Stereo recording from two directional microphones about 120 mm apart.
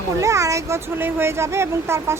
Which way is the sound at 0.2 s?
25° right (ahead or behind).